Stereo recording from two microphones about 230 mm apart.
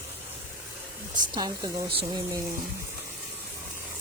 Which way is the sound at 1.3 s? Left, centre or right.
Centre.